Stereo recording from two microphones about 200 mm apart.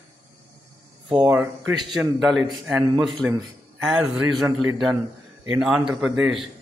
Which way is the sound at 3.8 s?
Centre (ahead or behind).